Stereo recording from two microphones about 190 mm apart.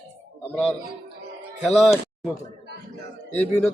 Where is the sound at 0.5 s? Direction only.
5° left (ahead or behind).